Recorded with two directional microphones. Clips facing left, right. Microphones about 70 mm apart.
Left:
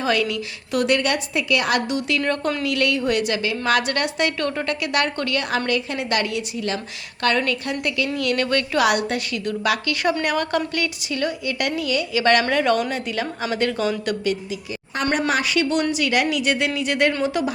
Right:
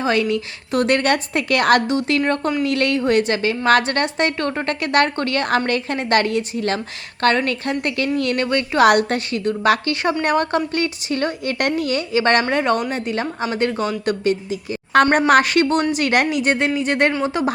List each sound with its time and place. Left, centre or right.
0.0 s a woman's voice: right
1.9 s a woman's voice: right
8.4 s a woman's voice: right
8.8 s a woman's voice: right
15.3 s a woman's voice: right